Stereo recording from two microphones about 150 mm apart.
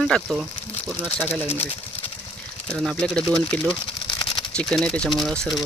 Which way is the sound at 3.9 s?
30° left (ahead or behind).